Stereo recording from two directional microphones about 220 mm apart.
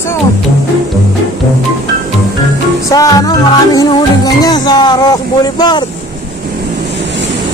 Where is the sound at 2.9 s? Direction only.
15° left (ahead or behind).